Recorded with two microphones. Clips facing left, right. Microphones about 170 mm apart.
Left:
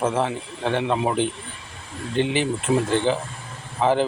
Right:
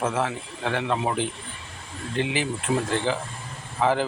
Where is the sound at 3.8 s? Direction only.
25° left (ahead or behind).